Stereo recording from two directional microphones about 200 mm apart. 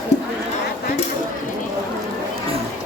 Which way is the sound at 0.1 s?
35° left (ahead or behind).